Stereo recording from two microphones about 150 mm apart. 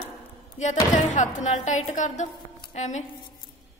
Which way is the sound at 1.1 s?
55° left (ahead or behind).